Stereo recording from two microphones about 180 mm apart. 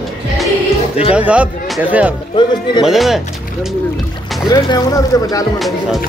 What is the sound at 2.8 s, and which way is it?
Speech, centre (ahead or behind).